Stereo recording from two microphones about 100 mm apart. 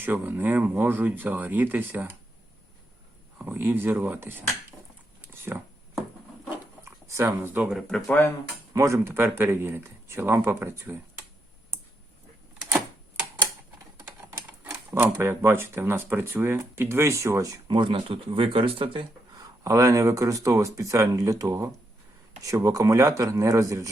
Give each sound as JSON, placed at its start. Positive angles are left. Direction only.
{"t": 0.0, "sound": "speech", "side_deg": -20}
{"t": 3.3, "sound": "speech", "side_deg": -20}
{"t": 5.3, "sound": "a sound", "side_deg": -25}
{"t": 5.9, "sound": "wood", "side_deg": 0}
{"t": 7.1, "sound": "speech", "side_deg": -25}
{"t": 7.7, "sound": "speech", "side_deg": 5}
{"t": 8.7, "sound": "speech", "side_deg": -30}
{"t": 14.9, "sound": "speech", "side_deg": -25}
{"t": 17.7, "sound": "speech", "side_deg": -55}
{"t": 19.4, "sound": "speech", "side_deg": -30}